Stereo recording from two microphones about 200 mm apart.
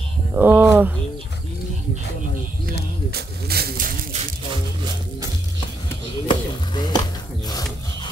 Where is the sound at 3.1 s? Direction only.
50° right (ahead or behind).